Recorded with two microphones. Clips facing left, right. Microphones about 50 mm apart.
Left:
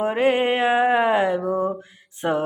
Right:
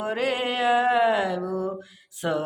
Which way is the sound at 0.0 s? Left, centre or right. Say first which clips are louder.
Left 6 dB; left.